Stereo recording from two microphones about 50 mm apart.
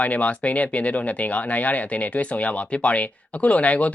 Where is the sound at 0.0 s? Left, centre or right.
Left.